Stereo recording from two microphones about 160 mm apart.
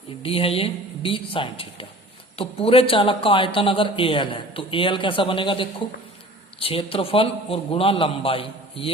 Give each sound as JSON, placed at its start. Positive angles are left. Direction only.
{"t": 0.2, "sound": "a man's voice", "side_deg": 35}